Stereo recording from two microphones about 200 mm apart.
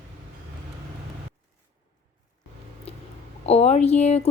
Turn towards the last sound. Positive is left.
turn(degrees=35)  # may be behind; listen again after turning